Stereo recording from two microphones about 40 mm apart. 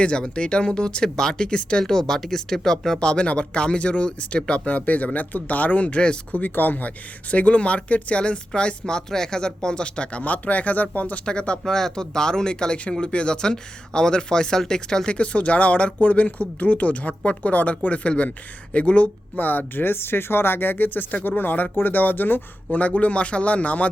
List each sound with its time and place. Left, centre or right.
0.0 s speech: left
1.8 s speech: centre
3.0 s speech: left
4.6 s speech: left
11.3 s speech: left
11.6 s speech: centre
15.1 s speech: left
22.8 s speech: left